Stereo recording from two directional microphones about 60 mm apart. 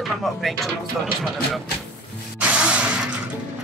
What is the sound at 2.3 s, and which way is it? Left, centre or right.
Music, right.